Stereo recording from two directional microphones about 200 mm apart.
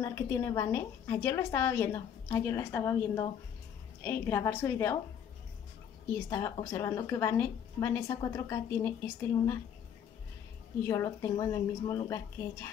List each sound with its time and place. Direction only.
0.0 s a woman's voice: 15° left (ahead or behind)
6.1 s a woman's voice: 15° left (ahead or behind)
10.9 s a woman's voice: 15° left (ahead or behind)